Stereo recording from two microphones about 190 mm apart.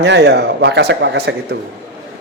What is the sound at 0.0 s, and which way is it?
A man's voice, 60° right (ahead or behind).